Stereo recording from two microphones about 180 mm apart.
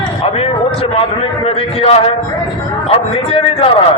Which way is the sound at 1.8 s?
35° left (ahead or behind).